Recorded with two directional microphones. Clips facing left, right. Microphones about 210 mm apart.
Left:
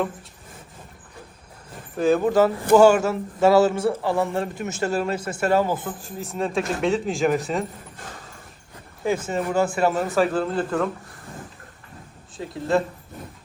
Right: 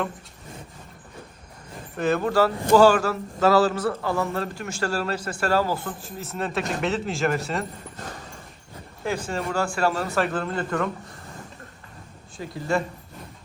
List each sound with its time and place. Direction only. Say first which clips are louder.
2.0 s a man's voice: left 3 dB; 10° left (ahead or behind)
5.8 s speech: left 2 dB; centre (ahead or behind)
9.2 s speech: left 3 dB; 5° left (ahead or behind)
9.6 s a man's voice: left 3 dB; 20° left (ahead or behind)
9.9 s speech: left 4 dB; centre (ahead or behind)
12.5 s speech: left 3 dB; centre (ahead or behind)